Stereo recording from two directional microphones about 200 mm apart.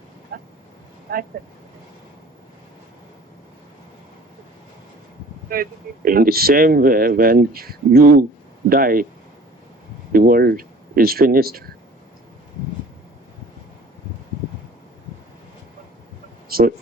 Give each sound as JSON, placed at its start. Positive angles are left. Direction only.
{"t": 0.3, "sound": "vehicle", "side_deg": -45}
{"t": 1.1, "sound": "speech", "side_deg": -45}
{"t": 5.5, "sound": "speech", "side_deg": -45}
{"t": 10.1, "sound": "speech", "side_deg": -45}
{"t": 16.5, "sound": "a sound", "side_deg": -50}